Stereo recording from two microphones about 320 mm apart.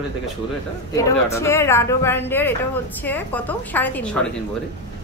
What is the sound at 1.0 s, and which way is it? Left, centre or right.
A woman's voice, centre.